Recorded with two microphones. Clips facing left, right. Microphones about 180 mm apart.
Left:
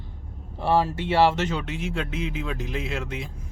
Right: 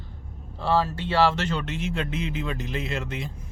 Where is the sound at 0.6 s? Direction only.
20° left (ahead or behind).